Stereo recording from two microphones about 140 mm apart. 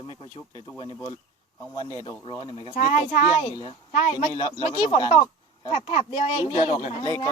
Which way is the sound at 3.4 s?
40° left (ahead or behind).